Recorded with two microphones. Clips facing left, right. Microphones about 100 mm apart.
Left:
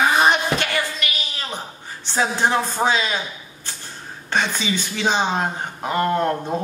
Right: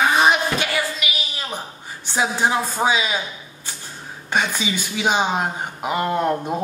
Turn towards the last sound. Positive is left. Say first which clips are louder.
# even
turn(degrees=-10)  # may be behind; listen again after turning